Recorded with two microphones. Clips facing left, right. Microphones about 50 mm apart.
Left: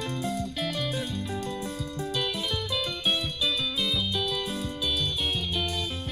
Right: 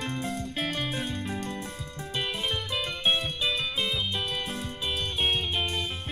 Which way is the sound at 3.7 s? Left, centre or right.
Right.